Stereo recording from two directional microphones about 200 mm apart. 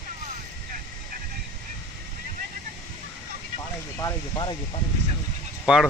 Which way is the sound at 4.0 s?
20° left (ahead or behind).